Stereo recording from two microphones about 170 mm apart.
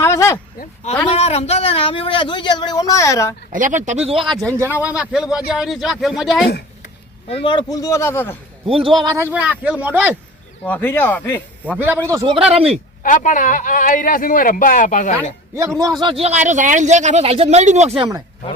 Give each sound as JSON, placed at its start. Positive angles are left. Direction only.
{"t": 0.0, "sound": "a sound", "side_deg": 15}
{"t": 1.0, "sound": "a man's voice", "side_deg": 35}
{"t": 3.5, "sound": "speech", "side_deg": -50}
{"t": 4.6, "sound": "speech", "side_deg": -10}
{"t": 7.3, "sound": "a man's voice", "side_deg": 30}
{"t": 8.6, "sound": "speech", "side_deg": -30}
{"t": 9.1, "sound": "speech", "side_deg": -10}
{"t": 10.6, "sound": "speech", "side_deg": 10}
{"t": 11.6, "sound": "a man's voice", "side_deg": -10}
{"t": 12.4, "sound": "speech", "side_deg": -35}
{"t": 13.0, "sound": "a man's voice", "side_deg": 50}
{"t": 15.8, "sound": "speech", "side_deg": -25}